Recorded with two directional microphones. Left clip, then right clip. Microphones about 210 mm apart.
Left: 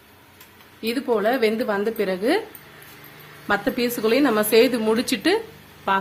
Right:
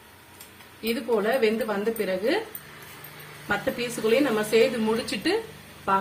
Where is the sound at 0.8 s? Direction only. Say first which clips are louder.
Left 4 dB; 55° left (ahead or behind).